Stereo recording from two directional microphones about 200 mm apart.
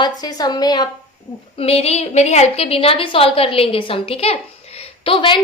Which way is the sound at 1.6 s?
30° left (ahead or behind).